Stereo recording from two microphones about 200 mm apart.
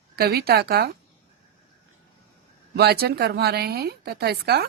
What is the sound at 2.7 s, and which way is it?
A woman's voice, 50° right (ahead or behind).